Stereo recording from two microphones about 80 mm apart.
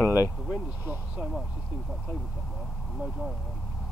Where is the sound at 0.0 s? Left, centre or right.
Left.